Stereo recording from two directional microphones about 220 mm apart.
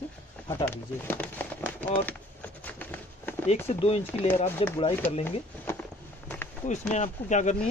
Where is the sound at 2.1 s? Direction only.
5° left (ahead or behind).